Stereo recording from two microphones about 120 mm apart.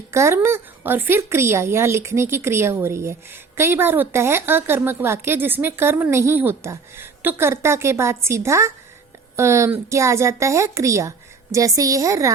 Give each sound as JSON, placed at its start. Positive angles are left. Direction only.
{"t": 0.1, "sound": "a woman's voice", "side_deg": -20}